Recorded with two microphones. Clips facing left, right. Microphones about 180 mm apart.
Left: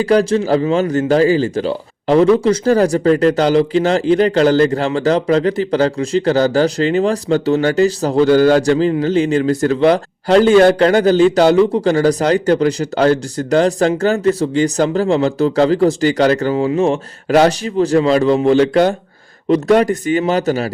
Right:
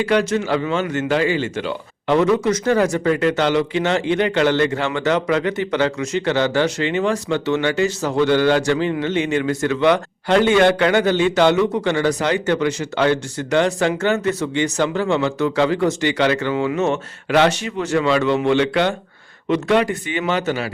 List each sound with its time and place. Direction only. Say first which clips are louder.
0.0 s speech: left 5 dB; 35° left (ahead or behind)